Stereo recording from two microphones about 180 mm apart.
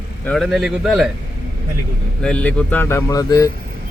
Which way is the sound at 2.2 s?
5° left (ahead or behind).